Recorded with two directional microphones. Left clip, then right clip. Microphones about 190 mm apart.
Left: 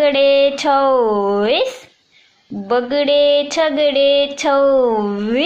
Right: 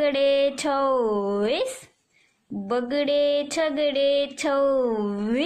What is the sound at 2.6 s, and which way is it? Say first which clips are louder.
Mantra: left 9 dB; 20° right (ahead or behind).